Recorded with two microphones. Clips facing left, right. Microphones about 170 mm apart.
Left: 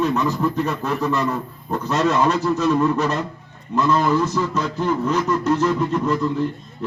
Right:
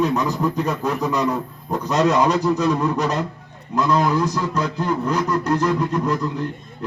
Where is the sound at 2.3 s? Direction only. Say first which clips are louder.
Even; 15° right (ahead or behind).